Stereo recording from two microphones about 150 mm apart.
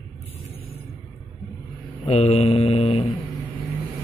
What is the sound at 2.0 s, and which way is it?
Speech, 45° left (ahead or behind).